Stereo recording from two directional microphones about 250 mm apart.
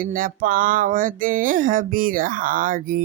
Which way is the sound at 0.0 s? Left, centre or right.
Right.